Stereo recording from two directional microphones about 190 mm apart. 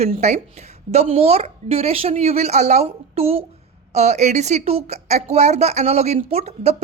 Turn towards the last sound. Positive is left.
turn(degrees=-35)  # may be behind; listen again after turning